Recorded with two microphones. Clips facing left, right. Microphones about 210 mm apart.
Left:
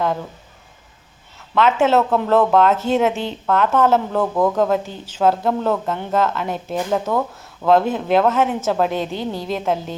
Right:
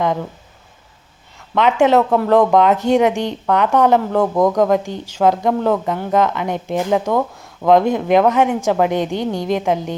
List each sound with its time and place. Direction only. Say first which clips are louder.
1.5 s speech: right 2 dB; 15° right (ahead or behind)
5.8 s speech: right 3 dB; centre (ahead or behind)
6.1 s speech: right 3 dB; 15° right (ahead or behind)